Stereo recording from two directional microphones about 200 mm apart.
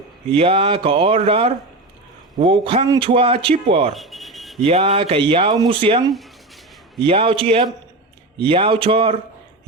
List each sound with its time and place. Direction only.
0.3 s speech: 30° right (ahead or behind)
3.9 s speech: centre (ahead or behind)
4.6 s speech: 30° right (ahead or behind)